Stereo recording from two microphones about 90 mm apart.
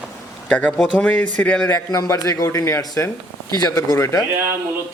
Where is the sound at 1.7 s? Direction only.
35° left (ahead or behind).